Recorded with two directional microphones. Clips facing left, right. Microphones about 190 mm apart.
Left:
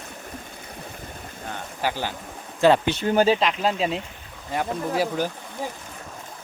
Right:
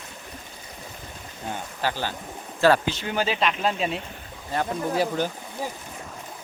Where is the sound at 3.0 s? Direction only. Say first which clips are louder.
Left 9 dB; 40° left (ahead or behind).